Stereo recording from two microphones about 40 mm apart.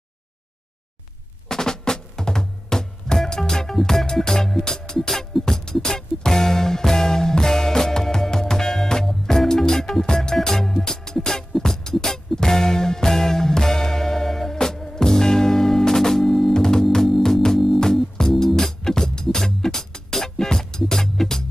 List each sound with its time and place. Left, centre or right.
1.5 s music: centre
16.5 s music: centre